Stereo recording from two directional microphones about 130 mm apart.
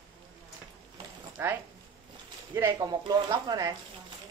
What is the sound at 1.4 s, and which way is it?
Speech, 20° right (ahead or behind).